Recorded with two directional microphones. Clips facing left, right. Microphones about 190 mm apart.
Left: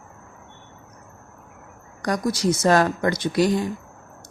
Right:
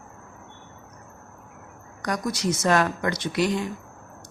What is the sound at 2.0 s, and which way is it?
Speech, 35° left (ahead or behind).